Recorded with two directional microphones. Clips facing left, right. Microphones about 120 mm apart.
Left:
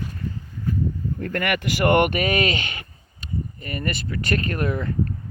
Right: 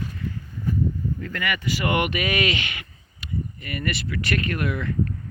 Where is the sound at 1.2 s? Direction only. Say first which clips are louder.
Left 4 dB; 50° left (ahead or behind); by 4.9 s 35° left (ahead or behind).